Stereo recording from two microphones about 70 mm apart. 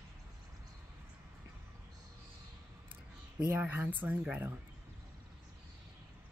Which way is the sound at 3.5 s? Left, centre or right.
Right.